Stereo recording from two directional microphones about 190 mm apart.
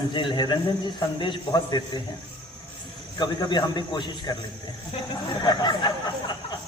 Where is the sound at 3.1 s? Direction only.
20° left (ahead or behind).